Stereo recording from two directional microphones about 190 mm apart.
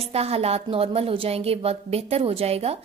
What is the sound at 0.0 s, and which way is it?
A woman's voice, 35° right (ahead or behind).